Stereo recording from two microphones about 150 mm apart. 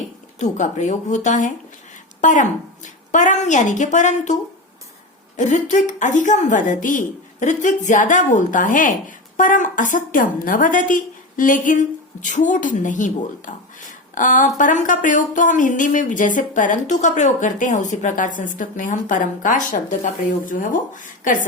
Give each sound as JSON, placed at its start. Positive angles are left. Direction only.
{"t": 0.3, "sound": "a woman's voice", "side_deg": 50}
{"t": 5.4, "sound": "a woman's voice", "side_deg": 55}